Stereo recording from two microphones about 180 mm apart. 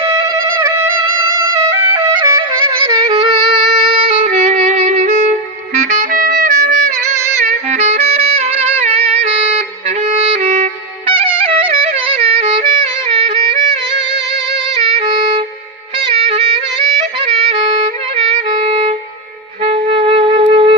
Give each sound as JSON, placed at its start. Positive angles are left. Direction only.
{"t": 0.0, "sound": "music", "side_deg": -15}
{"t": 3.4, "sound": "music", "side_deg": 0}
{"t": 3.9, "sound": "music", "side_deg": -30}
{"t": 18.3, "sound": "music", "side_deg": -35}